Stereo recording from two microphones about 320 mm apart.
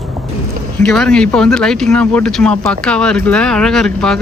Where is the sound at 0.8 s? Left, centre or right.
Centre.